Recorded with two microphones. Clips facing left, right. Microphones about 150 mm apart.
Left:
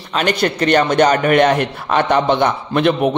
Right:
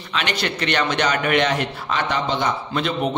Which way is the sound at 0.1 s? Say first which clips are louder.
Left 7 dB; 45° left (ahead or behind).